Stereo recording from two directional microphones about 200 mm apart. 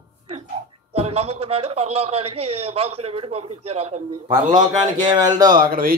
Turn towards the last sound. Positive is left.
turn(degrees=-45)  # may be behind; listen again after turning